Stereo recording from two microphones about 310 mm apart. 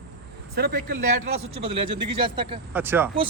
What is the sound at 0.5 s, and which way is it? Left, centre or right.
Speech, right.